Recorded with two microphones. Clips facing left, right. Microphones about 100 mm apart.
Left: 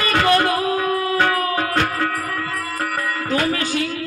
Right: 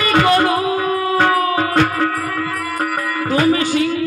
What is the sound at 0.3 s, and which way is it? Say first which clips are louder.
Music: right 2 dB; 15° right (ahead or behind).